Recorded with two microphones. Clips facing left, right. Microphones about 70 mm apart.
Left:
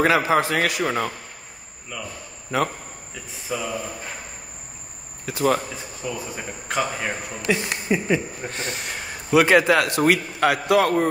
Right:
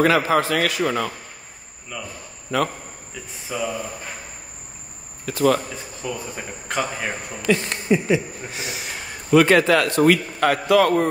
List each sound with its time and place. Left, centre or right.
0.0 s a man's voice: centre
2.5 s a man's voice: centre
3.4 s speech: centre
5.3 s a man's voice: centre
6.0 s a man's voice: centre
8.1 s a man's voice: centre